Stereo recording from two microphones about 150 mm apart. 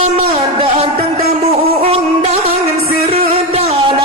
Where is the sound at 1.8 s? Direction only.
40° right (ahead or behind).